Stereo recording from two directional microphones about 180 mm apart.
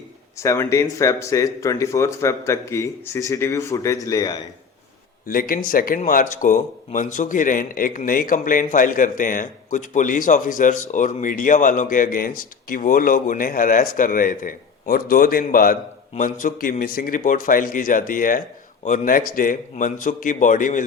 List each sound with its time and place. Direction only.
0.3 s speech: 15° left (ahead or behind)
5.3 s speech: 50° left (ahead or behind)